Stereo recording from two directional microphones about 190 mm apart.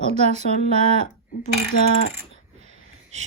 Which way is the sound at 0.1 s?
35° right (ahead or behind).